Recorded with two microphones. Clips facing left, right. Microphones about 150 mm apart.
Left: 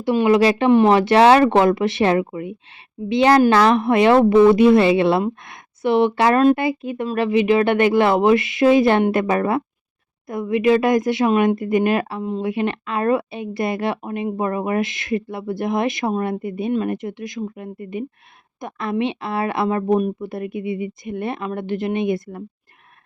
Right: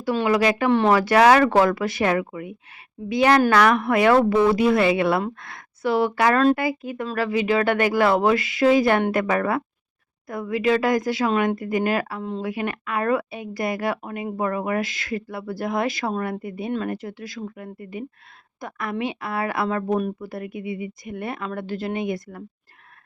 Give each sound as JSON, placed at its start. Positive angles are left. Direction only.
{"t": 0.0, "sound": "a woman's voice", "side_deg": 20}